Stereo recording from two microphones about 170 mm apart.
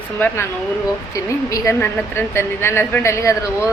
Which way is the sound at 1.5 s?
15° left (ahead or behind).